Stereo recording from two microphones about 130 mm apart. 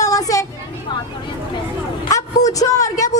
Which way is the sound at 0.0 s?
25° left (ahead or behind).